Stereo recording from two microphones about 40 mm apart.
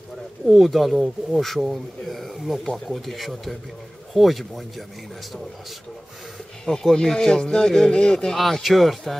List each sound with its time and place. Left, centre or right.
0.5 s speech: centre
6.6 s speech: centre
8.4 s speech: centre